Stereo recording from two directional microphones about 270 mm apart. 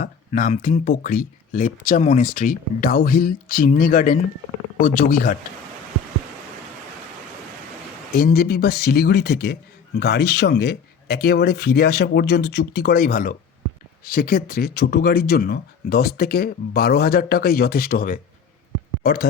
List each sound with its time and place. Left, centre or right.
0.0 s a man's voice: left
8.2 s a man's voice: left